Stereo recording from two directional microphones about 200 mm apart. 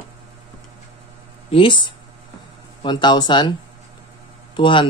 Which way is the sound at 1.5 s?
25° left (ahead or behind).